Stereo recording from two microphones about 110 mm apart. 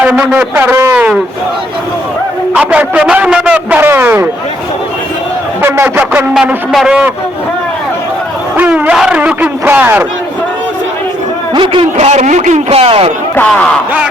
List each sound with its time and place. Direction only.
0.0 s a man's voice: 10° right (ahead or behind)
2.6 s a man's voice: 10° right (ahead or behind)
5.6 s speech: 20° right (ahead or behind)
6.7 s a man's voice: 5° right (ahead or behind)
8.5 s a man's voice: 15° right (ahead or behind)
11.5 s a man's voice: 50° right (ahead or behind)
11.9 s a man's voice: 90° right; by 13.1 s 60° right (ahead or behind)
13.5 s speech: 10° left (ahead or behind)